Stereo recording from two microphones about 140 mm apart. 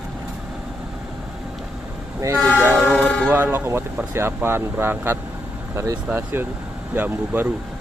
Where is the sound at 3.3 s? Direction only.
15° right (ahead or behind).